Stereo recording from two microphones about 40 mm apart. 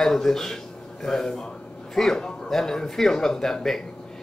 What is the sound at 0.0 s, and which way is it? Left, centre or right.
Speech, centre.